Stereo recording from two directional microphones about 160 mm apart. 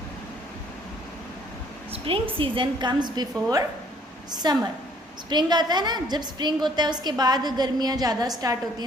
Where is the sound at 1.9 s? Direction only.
35° right (ahead or behind).